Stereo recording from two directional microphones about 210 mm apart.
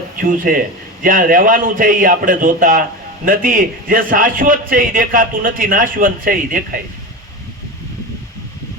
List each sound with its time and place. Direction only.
0.2 s a man's voice: 40° right (ahead or behind)